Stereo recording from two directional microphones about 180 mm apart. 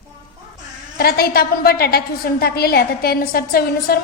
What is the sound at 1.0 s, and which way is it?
A woman's voice, 60° left (ahead or behind).